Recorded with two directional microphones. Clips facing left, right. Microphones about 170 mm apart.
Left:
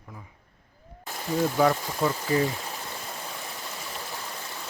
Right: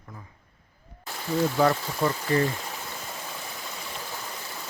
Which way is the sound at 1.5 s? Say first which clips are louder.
Even; 5° left (ahead or behind).